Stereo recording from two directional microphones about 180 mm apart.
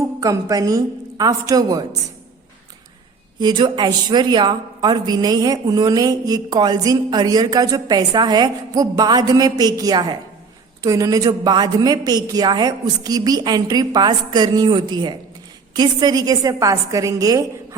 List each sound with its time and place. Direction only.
0.2 s a woman's voice: 20° right (ahead or behind)
3.4 s a woman's voice: 25° right (ahead or behind)